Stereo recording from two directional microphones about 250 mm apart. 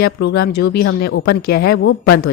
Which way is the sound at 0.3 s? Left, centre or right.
Left.